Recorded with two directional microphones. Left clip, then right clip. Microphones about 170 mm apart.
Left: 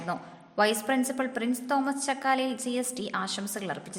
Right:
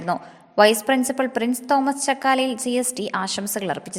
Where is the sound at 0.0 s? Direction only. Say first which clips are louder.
Right 9 dB; 40° right (ahead or behind).